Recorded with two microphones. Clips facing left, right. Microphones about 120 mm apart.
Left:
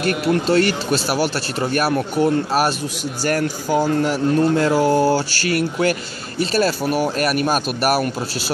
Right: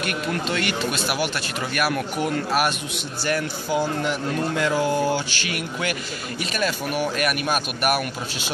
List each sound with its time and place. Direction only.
0.3 s speech: 35° left (ahead or behind)
3.3 s speech: 40° left (ahead or behind)